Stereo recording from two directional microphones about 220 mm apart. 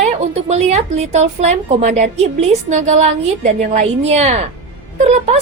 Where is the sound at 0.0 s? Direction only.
30° right (ahead or behind).